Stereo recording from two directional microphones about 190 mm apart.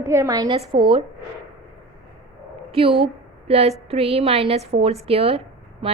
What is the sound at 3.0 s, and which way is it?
A woman's voice, 30° right (ahead or behind).